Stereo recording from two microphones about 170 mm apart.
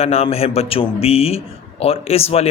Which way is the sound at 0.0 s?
35° left (ahead or behind).